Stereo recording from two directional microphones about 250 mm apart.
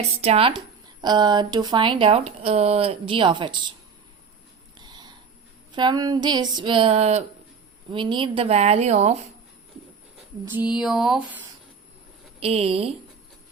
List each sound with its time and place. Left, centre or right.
0.2 s speech: right
4.8 s sniff: centre
5.7 s speech: centre
10.4 s a sound: centre
12.4 s speech: right